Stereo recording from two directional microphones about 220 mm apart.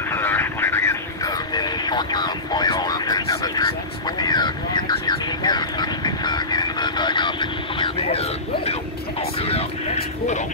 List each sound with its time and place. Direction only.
0.1 s vehicle: 10° left (ahead or behind)
4.2 s a sound: 20° left (ahead or behind)
9.4 s vehicle: 25° left (ahead or behind)